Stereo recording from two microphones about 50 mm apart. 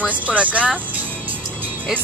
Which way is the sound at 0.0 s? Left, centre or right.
Right.